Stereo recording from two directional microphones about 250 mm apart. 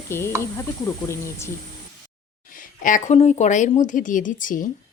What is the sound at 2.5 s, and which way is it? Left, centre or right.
A woman's voice, left.